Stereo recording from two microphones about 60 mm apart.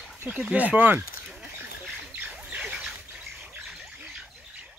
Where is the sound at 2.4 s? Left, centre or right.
Centre.